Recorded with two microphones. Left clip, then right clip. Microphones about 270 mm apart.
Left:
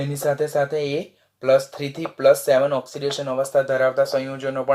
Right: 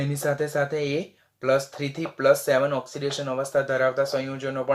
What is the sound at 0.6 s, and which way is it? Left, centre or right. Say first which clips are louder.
Speech: left 3 dB; centre.